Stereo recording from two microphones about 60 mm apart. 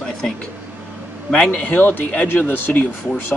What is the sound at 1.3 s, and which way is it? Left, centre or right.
Speech, centre.